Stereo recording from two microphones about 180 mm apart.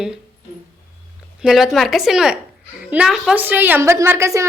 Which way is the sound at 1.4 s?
5° right (ahead or behind).